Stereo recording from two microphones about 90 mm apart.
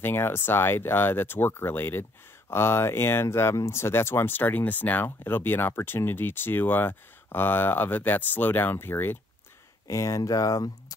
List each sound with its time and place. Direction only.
0.0 s speech: 25° left (ahead or behind)
9.8 s speech: 35° left (ahead or behind)